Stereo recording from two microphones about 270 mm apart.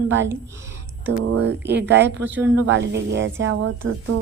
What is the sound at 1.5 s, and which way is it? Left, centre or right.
Speech, right.